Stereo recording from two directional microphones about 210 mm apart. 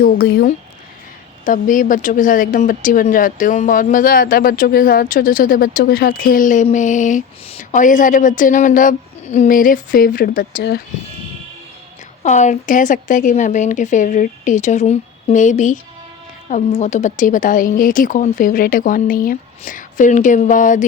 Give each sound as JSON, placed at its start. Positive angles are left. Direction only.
{"t": 0.0, "sound": "speech", "side_deg": 45}
{"t": 12.2, "sound": "speech", "side_deg": 35}